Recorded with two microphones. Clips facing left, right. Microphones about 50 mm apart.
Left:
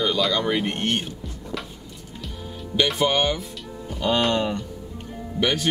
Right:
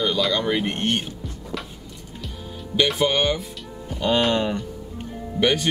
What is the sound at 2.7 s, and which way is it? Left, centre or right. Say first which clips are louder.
Speech: right 1 dB; centre.